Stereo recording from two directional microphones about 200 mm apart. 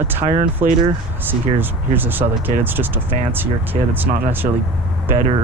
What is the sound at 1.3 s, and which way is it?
Speech, 10° right (ahead or behind).